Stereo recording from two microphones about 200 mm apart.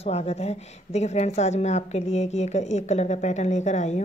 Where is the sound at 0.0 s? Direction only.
30° left (ahead or behind).